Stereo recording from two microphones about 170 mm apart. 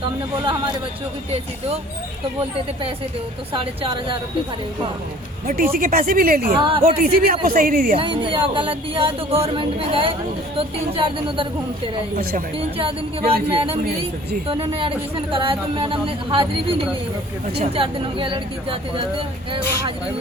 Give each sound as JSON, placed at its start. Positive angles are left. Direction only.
{"t": 3.5, "sound": "a woman's voice", "side_deg": -30}
{"t": 5.7, "sound": "speech", "side_deg": -55}
{"t": 6.6, "sound": "a woman's voice", "side_deg": -30}
{"t": 6.8, "sound": "speech", "side_deg": -60}
{"t": 7.9, "sound": "speech", "side_deg": -30}
{"t": 12.5, "sound": "speech", "side_deg": -35}